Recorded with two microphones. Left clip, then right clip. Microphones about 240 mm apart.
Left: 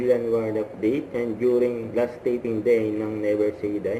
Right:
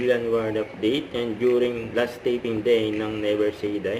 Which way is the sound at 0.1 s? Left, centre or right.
Right.